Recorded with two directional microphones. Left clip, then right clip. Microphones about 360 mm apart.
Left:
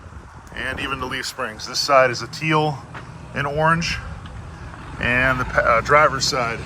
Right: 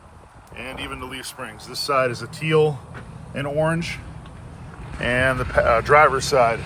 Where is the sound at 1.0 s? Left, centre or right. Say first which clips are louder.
Left 7 dB; centre.